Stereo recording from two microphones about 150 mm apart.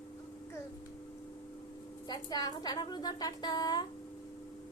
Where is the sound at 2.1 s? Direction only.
25° left (ahead or behind).